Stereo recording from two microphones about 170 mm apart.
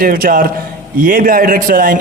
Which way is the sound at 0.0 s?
60° right (ahead or behind).